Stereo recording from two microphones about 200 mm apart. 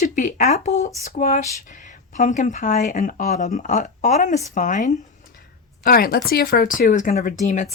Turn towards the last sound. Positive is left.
turn(degrees=40)  # may be behind; listen again after turning